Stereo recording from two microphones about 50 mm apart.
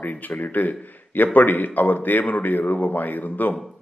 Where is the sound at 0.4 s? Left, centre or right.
Left.